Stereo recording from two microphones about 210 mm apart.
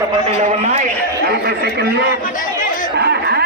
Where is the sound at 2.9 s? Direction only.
50° right (ahead or behind).